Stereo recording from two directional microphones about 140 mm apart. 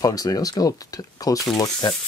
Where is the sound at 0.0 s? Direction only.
25° left (ahead or behind).